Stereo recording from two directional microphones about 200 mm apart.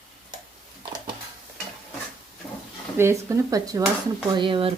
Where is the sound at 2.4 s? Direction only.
10° left (ahead or behind).